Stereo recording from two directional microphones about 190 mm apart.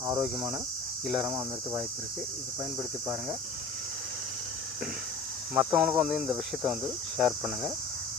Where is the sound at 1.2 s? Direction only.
20° right (ahead or behind).